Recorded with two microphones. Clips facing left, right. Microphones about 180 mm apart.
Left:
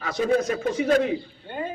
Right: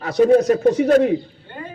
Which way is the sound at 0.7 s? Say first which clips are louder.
Right 3 dB; 50° right (ahead or behind).